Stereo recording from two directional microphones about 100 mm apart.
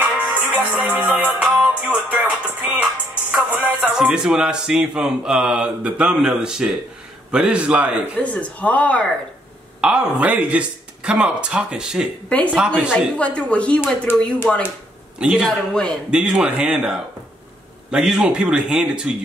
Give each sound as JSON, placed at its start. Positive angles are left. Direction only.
{"t": 0.0, "sound": "music", "side_deg": -15}
{"t": 3.9, "sound": "speech", "side_deg": -5}
{"t": 8.2, "sound": "speech", "side_deg": 15}
{"t": 9.8, "sound": "speech", "side_deg": -10}
{"t": 13.2, "sound": "speech", "side_deg": 10}
{"t": 14.1, "sound": "speech", "side_deg": 20}
{"t": 15.1, "sound": "a man's voice", "side_deg": -5}
{"t": 15.7, "sound": "speech", "side_deg": 10}
{"t": 16.1, "sound": "speech", "side_deg": -10}